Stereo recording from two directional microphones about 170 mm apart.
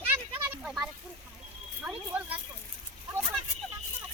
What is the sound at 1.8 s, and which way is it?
Speech, 10° right (ahead or behind).